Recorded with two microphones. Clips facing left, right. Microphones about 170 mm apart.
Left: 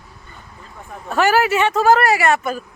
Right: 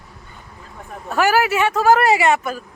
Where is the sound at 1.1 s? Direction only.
5° right (ahead or behind).